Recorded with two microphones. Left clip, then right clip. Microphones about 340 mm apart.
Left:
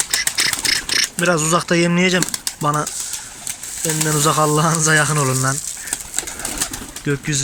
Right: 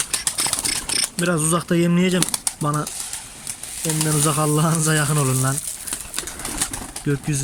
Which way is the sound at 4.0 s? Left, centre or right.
Centre.